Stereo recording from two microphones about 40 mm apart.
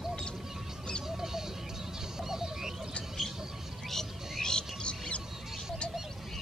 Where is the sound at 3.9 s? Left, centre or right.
Centre.